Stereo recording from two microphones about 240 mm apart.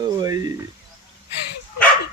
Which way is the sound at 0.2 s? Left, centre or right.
Centre.